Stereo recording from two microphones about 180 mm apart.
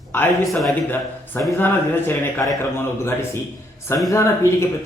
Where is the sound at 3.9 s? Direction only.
15° left (ahead or behind).